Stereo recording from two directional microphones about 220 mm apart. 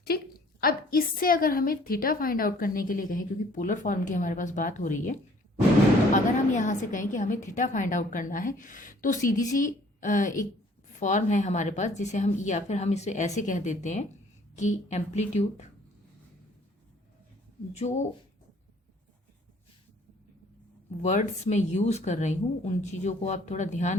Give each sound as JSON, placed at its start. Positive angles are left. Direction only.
{"t": 0.0, "sound": "a woman's voice", "side_deg": 45}
{"t": 21.0, "sound": "a woman's voice", "side_deg": 30}